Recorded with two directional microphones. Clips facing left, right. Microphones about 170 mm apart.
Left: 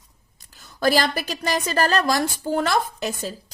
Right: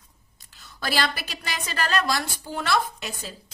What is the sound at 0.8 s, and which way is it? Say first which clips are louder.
A woman's voice: left 7 dB; 40° left (ahead or behind).